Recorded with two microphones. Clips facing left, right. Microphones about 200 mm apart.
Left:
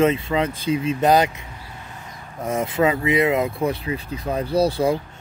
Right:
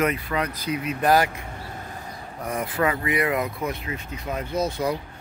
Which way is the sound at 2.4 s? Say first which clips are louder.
Left 5 dB; 25° left (ahead or behind).